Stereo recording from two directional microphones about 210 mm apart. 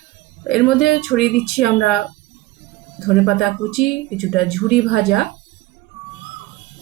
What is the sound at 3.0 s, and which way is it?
Speech, centre (ahead or behind).